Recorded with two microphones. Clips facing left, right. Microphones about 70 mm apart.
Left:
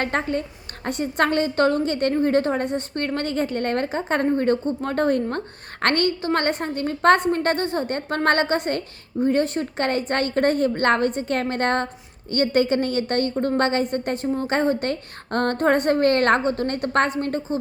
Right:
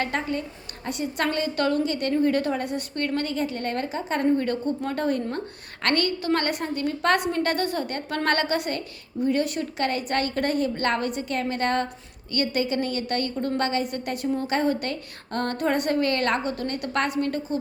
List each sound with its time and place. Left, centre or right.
0.0 s a woman's voice: left